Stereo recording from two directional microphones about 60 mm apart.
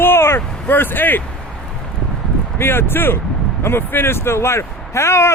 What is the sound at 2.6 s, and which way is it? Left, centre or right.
A man's voice, left.